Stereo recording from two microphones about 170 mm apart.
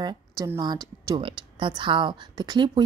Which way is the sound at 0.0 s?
25° right (ahead or behind).